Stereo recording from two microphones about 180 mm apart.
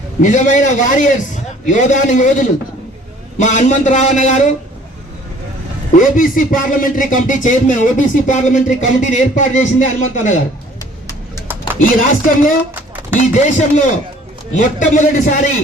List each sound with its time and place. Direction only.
0.2 s speech: 45° left (ahead or behind)
6.0 s speech: 50° left (ahead or behind)
11.8 s speech: 45° left (ahead or behind)